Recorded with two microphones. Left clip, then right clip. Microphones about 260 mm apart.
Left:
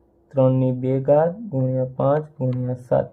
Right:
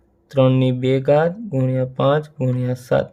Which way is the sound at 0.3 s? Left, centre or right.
Right.